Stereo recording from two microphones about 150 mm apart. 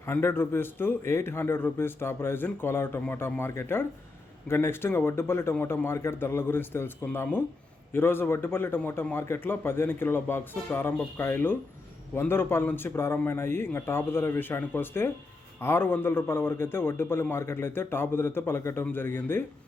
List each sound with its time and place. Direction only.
0.0 s a man's voice: 15° left (ahead or behind)